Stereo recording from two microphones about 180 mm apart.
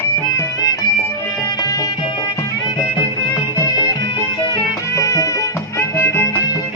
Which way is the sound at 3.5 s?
20° left (ahead or behind).